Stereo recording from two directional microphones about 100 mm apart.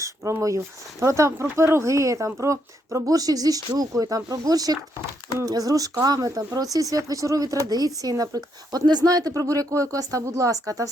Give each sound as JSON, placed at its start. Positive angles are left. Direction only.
{"t": 0.3, "sound": "speech", "side_deg": -30}